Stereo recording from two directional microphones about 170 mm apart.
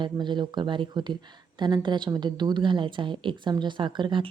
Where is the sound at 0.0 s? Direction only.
25° right (ahead or behind).